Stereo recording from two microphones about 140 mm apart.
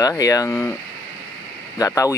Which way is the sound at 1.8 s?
25° left (ahead or behind).